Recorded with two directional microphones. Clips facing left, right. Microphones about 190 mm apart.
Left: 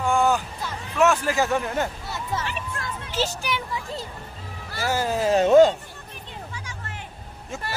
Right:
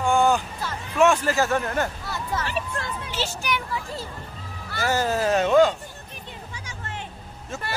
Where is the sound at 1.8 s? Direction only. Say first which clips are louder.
Even; 25° left (ahead or behind).